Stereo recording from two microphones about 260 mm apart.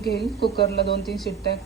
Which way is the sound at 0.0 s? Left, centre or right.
Left.